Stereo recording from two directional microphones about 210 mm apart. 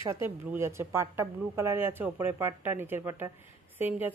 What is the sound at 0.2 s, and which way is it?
Speech, 10° right (ahead or behind).